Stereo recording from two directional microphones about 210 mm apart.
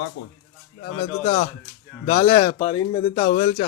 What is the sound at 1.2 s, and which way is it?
A man's voice, 45° left (ahead or behind).